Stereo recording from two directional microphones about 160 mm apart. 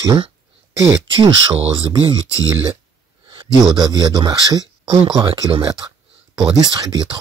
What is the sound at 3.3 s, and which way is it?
Speech, 30° right (ahead or behind).